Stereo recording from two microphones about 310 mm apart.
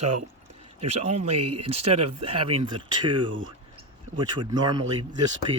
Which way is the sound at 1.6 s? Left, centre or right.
Centre.